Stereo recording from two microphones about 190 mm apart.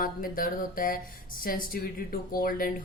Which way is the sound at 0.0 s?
50° left (ahead or behind).